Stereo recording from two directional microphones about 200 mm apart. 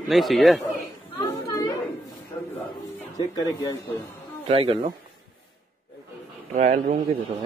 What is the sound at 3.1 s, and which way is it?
Speech, 20° left (ahead or behind).